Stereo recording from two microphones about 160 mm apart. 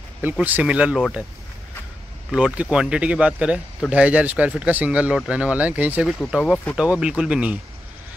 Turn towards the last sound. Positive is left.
turn(degrees=-5)  # may be behind; listen again after turning